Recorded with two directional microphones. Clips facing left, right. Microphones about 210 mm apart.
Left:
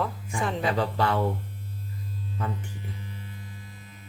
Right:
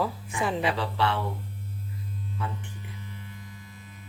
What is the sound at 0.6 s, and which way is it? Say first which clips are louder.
Speech: left 1 dB; 45° left (ahead or behind).